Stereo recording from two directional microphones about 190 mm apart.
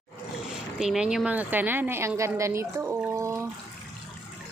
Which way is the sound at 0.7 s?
5° right (ahead or behind).